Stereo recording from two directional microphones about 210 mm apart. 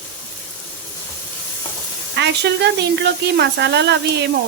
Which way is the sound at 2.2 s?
55° right (ahead or behind).